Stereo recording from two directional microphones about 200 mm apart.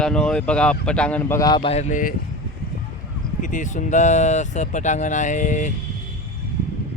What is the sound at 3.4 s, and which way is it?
Speech, 40° left (ahead or behind).